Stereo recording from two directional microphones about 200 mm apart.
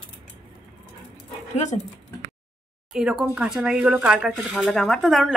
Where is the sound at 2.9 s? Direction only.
5° right (ahead or behind).